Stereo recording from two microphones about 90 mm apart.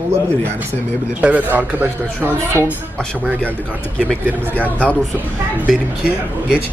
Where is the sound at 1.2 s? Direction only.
20° right (ahead or behind).